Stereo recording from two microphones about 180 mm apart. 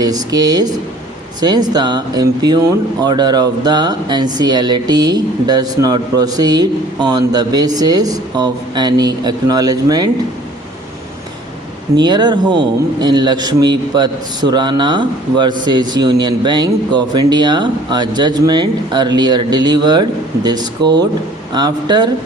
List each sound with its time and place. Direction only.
0.0 s speech: 20° right (ahead or behind)
12.0 s speech: 25° right (ahead or behind)